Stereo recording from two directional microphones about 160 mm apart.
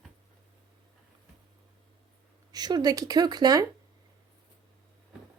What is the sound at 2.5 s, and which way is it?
Speech, 25° right (ahead or behind).